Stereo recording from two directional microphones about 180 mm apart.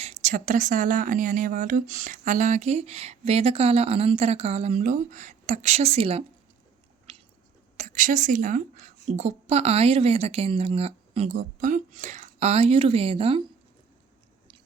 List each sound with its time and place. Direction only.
0.0 s speech: 40° right (ahead or behind)
7.8 s a woman's voice: 45° right (ahead or behind)